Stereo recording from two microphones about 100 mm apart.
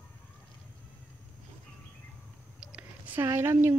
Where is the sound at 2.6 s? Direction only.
15° right (ahead or behind).